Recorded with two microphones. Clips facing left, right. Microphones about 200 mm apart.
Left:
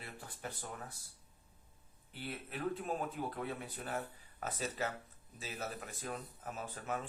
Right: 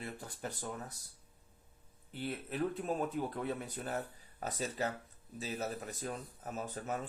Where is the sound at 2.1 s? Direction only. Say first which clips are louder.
Right 6 dB; 40° right (ahead or behind).